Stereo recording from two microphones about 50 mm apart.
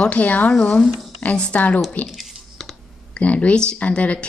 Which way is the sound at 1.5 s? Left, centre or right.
Left.